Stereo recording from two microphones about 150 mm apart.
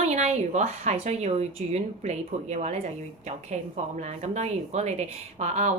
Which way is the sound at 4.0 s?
50° right (ahead or behind).